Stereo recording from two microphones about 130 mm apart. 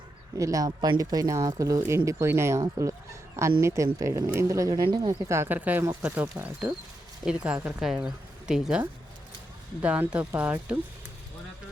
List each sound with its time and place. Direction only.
0.3 s speech: 25° right (ahead or behind)
5.3 s speech: 15° right (ahead or behind)
9.8 s speech: 10° right (ahead or behind)